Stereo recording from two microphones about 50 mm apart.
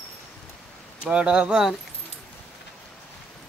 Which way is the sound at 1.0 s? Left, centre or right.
Right.